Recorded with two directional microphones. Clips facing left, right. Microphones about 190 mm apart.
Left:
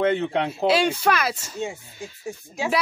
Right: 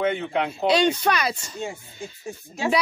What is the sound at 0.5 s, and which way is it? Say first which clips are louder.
A woman's voice: right 2 dB; 5° left (ahead or behind).